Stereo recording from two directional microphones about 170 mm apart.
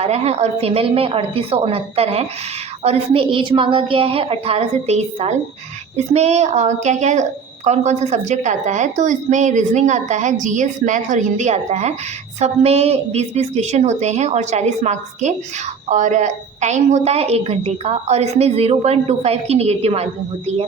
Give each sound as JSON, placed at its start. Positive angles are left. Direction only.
{"t": 0.0, "sound": "a woman's voice", "side_deg": -40}